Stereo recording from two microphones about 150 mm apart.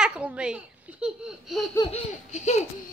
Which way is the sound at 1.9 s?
50° left (ahead or behind).